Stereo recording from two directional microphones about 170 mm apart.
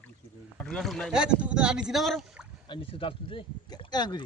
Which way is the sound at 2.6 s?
30° left (ahead or behind).